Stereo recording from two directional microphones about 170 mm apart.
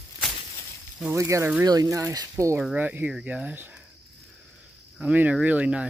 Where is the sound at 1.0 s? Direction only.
15° right (ahead or behind).